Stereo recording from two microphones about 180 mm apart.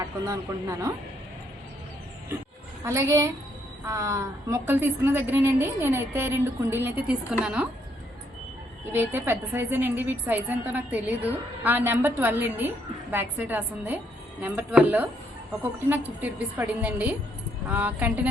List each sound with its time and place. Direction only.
0.0 s a woman's voice: 20° right (ahead or behind)
2.8 s a woman's voice: 15° right (ahead or behind)
8.9 s a woman's voice: 10° right (ahead or behind)